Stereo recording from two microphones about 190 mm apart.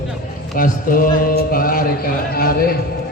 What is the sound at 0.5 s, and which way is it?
Speech, 45° left (ahead or behind).